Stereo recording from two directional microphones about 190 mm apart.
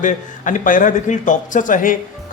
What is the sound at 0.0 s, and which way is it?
Speech, 40° left (ahead or behind).